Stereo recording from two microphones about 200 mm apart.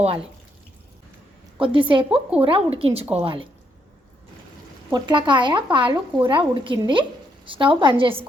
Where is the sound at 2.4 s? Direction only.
30° right (ahead or behind).